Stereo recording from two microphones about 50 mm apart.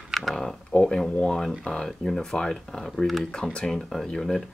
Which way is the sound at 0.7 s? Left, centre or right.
Centre.